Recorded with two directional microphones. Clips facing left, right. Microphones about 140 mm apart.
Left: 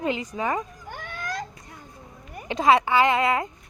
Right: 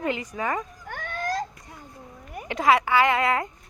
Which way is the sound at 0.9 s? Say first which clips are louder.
Right 3 dB; 50° right (ahead or behind).